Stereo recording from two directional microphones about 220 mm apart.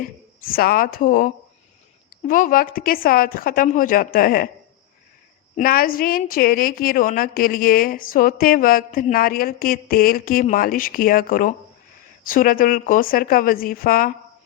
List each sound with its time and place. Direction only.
0.5 s a woman's voice: 40° left (ahead or behind)
5.5 s a woman's voice: 40° left (ahead or behind)